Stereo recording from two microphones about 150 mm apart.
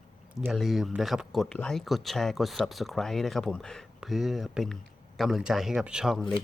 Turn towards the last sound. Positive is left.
turn(degrees=0)  # may be behind; listen again after turning